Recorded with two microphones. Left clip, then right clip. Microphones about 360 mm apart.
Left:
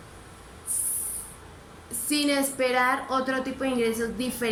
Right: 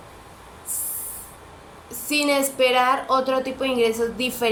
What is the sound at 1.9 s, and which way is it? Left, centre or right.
A woman's voice, centre.